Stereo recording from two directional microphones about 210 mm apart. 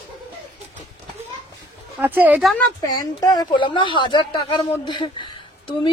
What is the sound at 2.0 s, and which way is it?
Speech, 10° right (ahead or behind).